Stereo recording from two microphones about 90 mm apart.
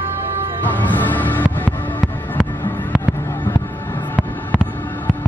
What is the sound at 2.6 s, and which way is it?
Fireworks, 20° left (ahead or behind).